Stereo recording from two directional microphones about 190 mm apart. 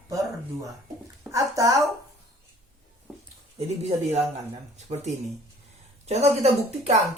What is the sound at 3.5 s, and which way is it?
Speech, 35° right (ahead or behind).